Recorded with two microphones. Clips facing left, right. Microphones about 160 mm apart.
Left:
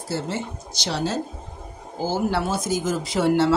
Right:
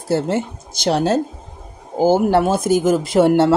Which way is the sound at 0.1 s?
55° right (ahead or behind).